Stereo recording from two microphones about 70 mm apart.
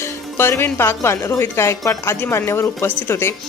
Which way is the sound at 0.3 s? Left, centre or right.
Left.